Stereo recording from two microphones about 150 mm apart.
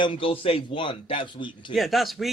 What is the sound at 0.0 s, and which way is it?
A man's voice, 35° left (ahead or behind).